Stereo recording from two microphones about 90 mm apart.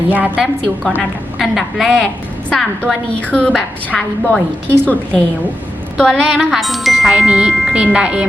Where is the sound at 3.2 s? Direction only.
15° left (ahead or behind).